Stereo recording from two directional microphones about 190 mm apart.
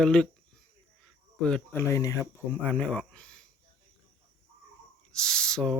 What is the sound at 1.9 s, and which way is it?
Speech, 15° left (ahead or behind).